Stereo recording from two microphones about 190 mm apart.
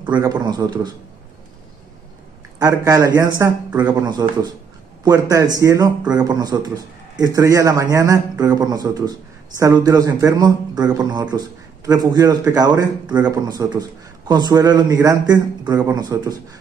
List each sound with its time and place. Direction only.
0.1 s a man's voice: 20° right (ahead or behind)
2.6 s a man's voice: 20° right (ahead or behind)